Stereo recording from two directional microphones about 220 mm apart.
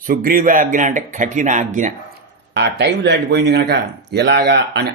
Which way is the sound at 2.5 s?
50° right (ahead or behind).